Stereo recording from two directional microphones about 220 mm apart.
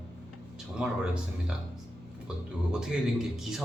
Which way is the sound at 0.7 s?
5° right (ahead or behind).